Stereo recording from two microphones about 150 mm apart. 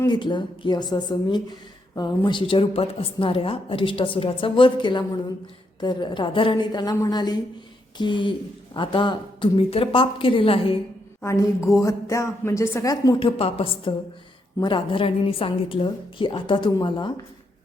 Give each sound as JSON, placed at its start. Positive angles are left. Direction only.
{"t": 0.0, "sound": "a woman's voice", "side_deg": 30}
{"t": 11.2, "sound": "a woman's voice", "side_deg": 20}
{"t": 13.1, "sound": "a woman's voice", "side_deg": 40}